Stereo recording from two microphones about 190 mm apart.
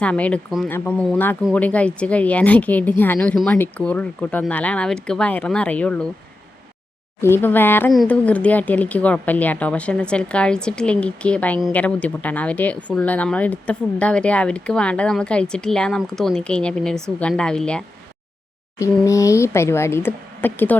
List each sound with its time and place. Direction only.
0.0 s speech: 5° left (ahead or behind)
7.2 s speech: 10° left (ahead or behind)
18.8 s speech: 15° left (ahead or behind)